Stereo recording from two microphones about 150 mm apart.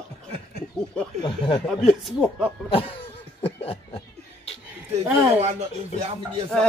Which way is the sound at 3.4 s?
40° left (ahead or behind).